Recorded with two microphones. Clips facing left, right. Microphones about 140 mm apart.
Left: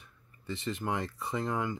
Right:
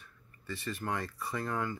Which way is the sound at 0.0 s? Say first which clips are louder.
Left 3 dB; 20° left (ahead or behind).